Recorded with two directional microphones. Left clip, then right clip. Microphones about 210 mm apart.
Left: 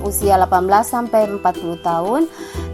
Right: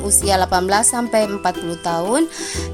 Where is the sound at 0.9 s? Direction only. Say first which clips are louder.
Left 1 dB; 30° right (ahead or behind).